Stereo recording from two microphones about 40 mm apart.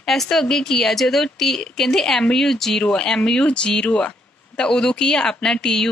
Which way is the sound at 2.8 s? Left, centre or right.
Left.